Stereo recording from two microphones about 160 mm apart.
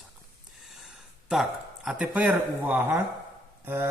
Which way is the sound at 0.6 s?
Centre (ahead or behind).